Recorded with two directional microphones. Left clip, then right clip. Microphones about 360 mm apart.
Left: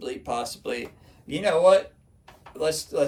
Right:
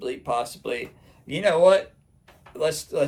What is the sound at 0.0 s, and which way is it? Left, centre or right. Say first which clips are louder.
Speech: right 3 dB; centre.